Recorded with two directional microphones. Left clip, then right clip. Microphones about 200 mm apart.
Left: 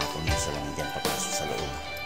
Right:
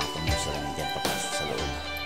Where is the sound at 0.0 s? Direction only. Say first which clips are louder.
Even; centre (ahead or behind).